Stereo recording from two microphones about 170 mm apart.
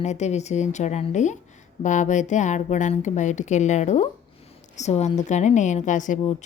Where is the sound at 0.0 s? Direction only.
40° left (ahead or behind).